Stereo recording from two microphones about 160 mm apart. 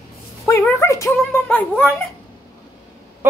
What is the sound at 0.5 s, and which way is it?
Speech, 15° left (ahead or behind).